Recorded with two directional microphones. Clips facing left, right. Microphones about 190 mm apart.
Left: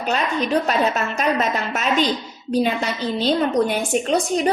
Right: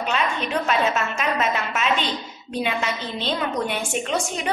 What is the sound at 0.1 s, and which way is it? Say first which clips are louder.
A woman's voice: left 6 dB; 40° left (ahead or behind).